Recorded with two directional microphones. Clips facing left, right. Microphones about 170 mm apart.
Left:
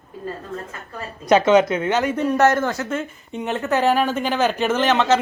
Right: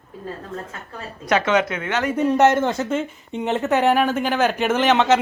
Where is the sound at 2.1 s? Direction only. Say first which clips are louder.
Right 4 dB; 20° right (ahead or behind).